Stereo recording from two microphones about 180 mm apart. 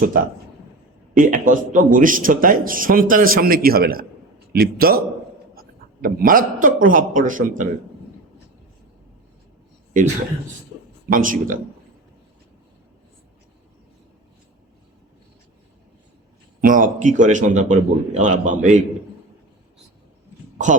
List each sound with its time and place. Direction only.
0.1 s a man's voice: 50° right (ahead or behind)
11.1 s a man's voice: 50° right (ahead or behind)
16.6 s a man's voice: 50° right (ahead or behind)